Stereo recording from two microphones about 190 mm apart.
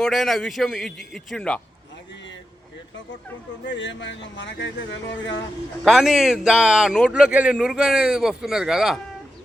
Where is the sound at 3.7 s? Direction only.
70° left (ahead or behind).